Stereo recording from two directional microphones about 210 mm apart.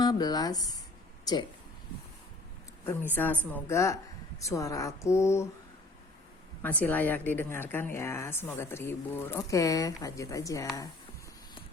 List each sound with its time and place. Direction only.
0.0 s speech: 20° left (ahead or behind)
3.2 s a woman's voice: 10° left (ahead or behind)
6.6 s a woman's voice: 10° left (ahead or behind)